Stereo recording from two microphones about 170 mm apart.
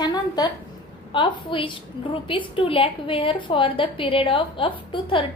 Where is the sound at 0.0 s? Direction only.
25° left (ahead or behind).